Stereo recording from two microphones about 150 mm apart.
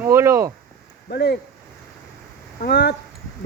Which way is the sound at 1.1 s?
90° left.